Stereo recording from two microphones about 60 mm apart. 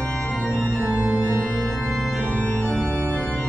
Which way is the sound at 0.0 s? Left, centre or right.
Left.